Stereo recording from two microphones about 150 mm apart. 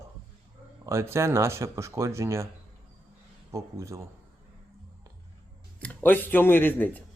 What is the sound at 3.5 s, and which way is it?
Speech, 20° right (ahead or behind).